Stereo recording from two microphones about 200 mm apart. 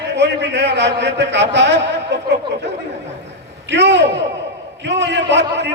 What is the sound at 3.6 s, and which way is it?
A man's voice, 60° right (ahead or behind).